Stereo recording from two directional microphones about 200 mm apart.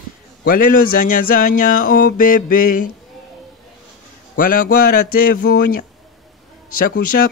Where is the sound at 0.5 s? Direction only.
45° left (ahead or behind).